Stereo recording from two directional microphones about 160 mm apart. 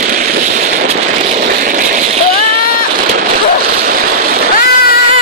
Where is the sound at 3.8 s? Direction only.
65° right (ahead or behind).